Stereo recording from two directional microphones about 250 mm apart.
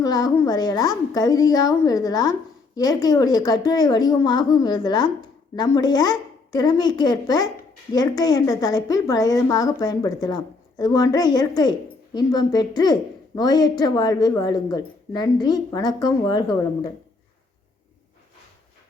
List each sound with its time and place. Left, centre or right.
0.0 s speech: centre